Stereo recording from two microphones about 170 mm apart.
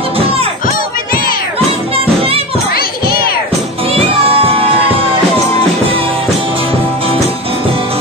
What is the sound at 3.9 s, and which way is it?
Music, 35° right (ahead or behind).